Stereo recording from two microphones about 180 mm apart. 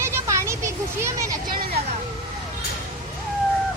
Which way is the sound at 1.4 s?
55° right (ahead or behind).